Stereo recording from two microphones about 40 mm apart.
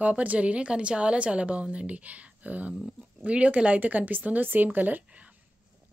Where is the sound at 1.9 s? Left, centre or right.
Right.